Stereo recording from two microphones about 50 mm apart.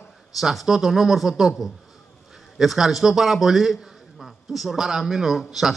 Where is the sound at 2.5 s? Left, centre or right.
Centre.